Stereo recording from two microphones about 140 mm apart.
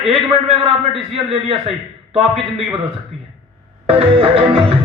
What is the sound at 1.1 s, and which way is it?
Music, 40° right (ahead or behind).